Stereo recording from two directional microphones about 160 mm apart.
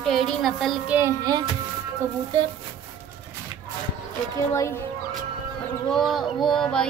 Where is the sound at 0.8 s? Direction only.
15° right (ahead or behind).